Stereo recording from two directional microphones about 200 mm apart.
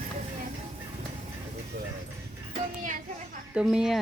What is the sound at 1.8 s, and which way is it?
Music, 50° right (ahead or behind).